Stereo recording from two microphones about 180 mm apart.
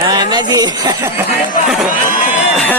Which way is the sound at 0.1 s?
20° right (ahead or behind).